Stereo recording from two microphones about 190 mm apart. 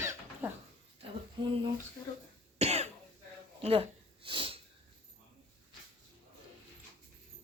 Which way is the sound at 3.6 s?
30° right (ahead or behind).